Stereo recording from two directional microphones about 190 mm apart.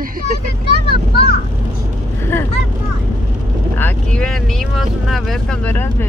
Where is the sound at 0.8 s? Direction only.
55° left (ahead or behind).